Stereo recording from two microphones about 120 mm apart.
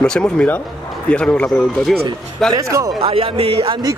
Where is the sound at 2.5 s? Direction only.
30° right (ahead or behind).